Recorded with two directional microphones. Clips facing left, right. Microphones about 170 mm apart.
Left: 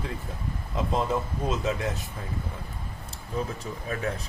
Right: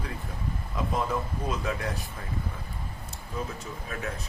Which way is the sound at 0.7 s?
25° left (ahead or behind).